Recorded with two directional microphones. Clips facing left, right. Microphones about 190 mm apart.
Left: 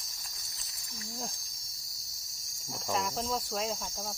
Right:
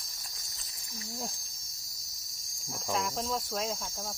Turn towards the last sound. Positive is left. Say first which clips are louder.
# even
turn(degrees=0)  # may be behind; listen again after turning